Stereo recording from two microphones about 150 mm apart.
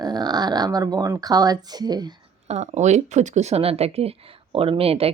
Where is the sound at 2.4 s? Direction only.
50° right (ahead or behind).